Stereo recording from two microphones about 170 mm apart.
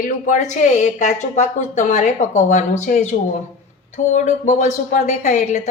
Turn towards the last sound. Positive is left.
turn(degrees=45)  # may be behind; listen again after turning